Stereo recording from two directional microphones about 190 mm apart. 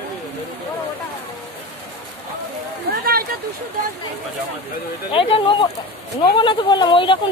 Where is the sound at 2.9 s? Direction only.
50° right (ahead or behind).